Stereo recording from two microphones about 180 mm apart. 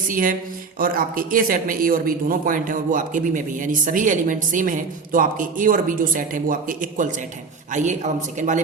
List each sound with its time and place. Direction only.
0.1 s speech: 50° right (ahead or behind)